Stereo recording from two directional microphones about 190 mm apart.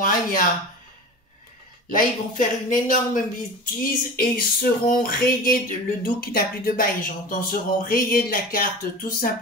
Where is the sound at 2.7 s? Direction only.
45° left (ahead or behind).